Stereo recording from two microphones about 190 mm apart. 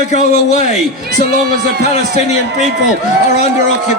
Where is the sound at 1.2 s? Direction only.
50° right (ahead or behind).